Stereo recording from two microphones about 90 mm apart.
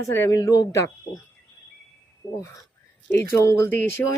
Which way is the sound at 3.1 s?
25° left (ahead or behind).